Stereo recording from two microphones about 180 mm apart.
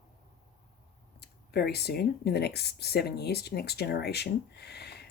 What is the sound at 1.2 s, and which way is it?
Speech, 65° left (ahead or behind).